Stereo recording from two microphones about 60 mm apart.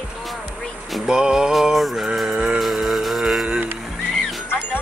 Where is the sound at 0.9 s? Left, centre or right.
Centre.